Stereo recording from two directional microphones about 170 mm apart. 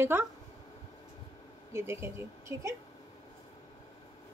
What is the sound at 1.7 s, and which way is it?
A woman's voice, 15° right (ahead or behind).